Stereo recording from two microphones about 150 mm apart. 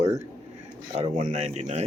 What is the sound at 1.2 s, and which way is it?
Speech, 45° right (ahead or behind).